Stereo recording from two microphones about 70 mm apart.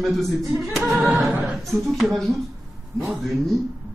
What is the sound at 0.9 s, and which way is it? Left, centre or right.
A capella, right.